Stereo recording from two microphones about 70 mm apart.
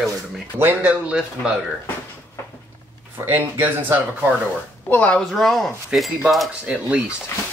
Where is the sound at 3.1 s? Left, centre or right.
Right.